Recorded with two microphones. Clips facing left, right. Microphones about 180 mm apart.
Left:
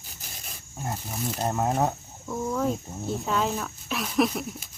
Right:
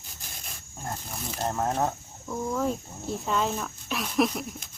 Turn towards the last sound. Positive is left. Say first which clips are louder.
# left 1 dB
turn(degrees=5)  # may be behind; listen again after turning